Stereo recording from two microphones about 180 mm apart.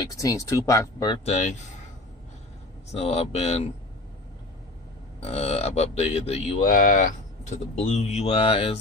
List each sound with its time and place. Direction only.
0.0 s speech: 20° left (ahead or behind)
1.2 s speech: 40° left (ahead or behind)
2.9 s speech: 35° left (ahead or behind)
5.2 s speech: 35° left (ahead or behind)
6.7 s speech: 45° left (ahead or behind); by 8.7 s 30° left (ahead or behind)